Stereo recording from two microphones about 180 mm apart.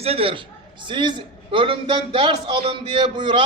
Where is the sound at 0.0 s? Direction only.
30° right (ahead or behind).